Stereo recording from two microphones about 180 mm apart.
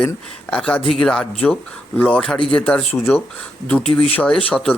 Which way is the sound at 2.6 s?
10° left (ahead or behind).